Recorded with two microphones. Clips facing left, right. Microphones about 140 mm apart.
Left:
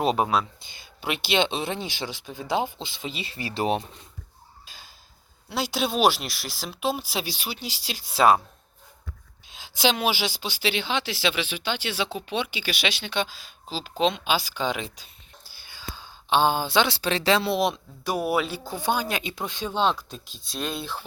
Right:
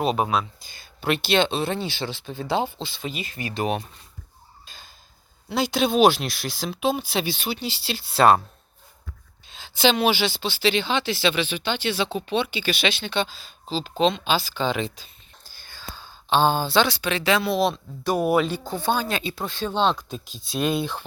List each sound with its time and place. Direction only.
0.6 s speech: 20° left (ahead or behind)
4.6 s tick-tock: 10° left (ahead or behind)
5.5 s speech: 5° left (ahead or behind)
9.6 s speech: 10° left (ahead or behind)
14.0 s a sound: 5° left (ahead or behind)
16.9 s speech: 35° left (ahead or behind); by 21.0 s centre (ahead or behind)